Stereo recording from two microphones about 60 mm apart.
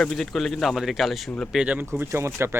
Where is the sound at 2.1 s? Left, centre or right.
Right.